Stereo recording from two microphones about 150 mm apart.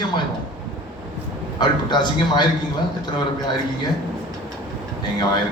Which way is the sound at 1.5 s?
30° left (ahead or behind).